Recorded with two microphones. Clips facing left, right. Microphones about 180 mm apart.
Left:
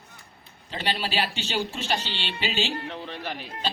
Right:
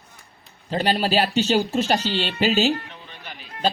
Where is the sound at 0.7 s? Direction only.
45° right (ahead or behind).